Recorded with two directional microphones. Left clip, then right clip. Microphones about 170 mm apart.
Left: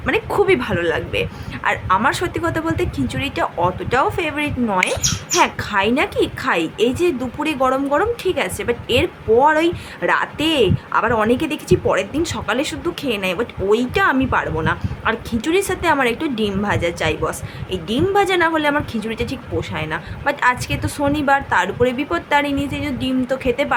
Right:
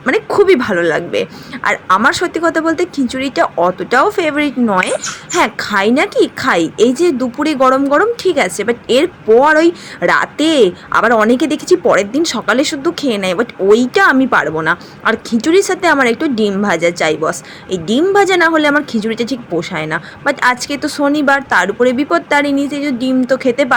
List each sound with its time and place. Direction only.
0.0 s speech: 25° right (ahead or behind)